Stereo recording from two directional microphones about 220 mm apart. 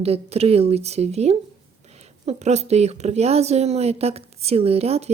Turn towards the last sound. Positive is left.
turn(degrees=-30)  # may be behind; listen again after turning